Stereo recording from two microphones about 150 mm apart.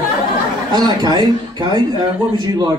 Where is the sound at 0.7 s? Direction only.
30° right (ahead or behind).